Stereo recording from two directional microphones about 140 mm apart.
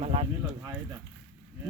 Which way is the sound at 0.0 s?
45° right (ahead or behind).